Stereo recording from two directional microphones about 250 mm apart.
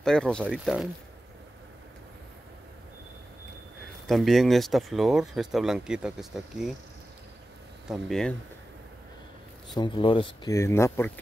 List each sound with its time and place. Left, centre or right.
0.0 s speech: centre
4.1 s speech: centre
7.9 s speech: centre
9.8 s speech: centre